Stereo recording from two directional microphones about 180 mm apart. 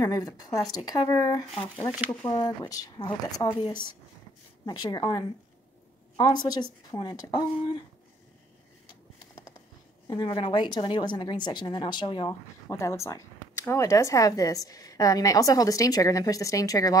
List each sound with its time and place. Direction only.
0.0 s a woman's voice: 20° left (ahead or behind)
10.0 s a woman's voice: 25° left (ahead or behind)